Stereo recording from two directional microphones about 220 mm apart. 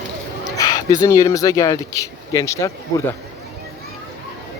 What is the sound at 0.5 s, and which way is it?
Speech, 15° left (ahead or behind).